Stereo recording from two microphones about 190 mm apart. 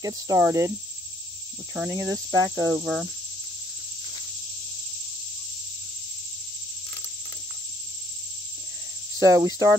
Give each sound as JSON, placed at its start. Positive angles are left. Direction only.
{"t": 0.0, "sound": "speech", "side_deg": -20}
{"t": 1.8, "sound": "speech", "side_deg": -15}
{"t": 2.8, "sound": "cricket", "side_deg": 0}
{"t": 9.2, "sound": "speech", "side_deg": -20}